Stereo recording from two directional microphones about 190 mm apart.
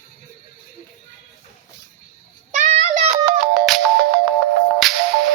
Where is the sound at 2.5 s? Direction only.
35° right (ahead or behind).